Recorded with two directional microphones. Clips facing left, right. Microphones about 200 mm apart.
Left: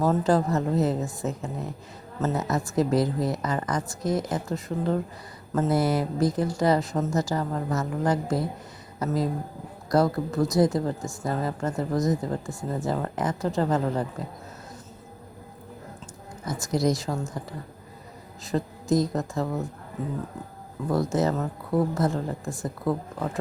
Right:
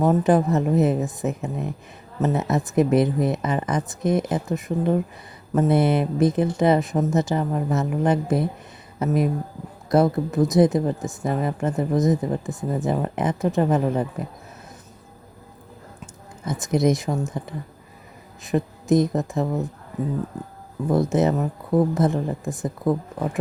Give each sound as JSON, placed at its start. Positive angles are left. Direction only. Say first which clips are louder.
{"t": 0.0, "sound": "speech", "louder": "right 4 dB", "side_deg": -20}
{"t": 16.5, "sound": "speech", "louder": "right 4 dB", "side_deg": -20}
{"t": 20.9, "sound": "speech", "louder": "right 4 dB", "side_deg": -20}